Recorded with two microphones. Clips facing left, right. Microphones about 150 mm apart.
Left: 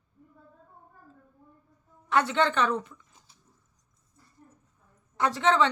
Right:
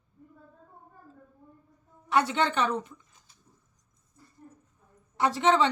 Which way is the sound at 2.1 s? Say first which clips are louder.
Left 1 dB; 15° right (ahead or behind).